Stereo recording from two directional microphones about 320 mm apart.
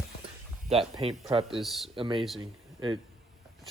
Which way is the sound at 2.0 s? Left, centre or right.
Centre.